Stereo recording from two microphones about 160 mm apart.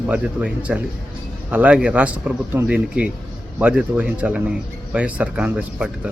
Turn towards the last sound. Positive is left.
turn(degrees=-5)  # may be behind; listen again after turning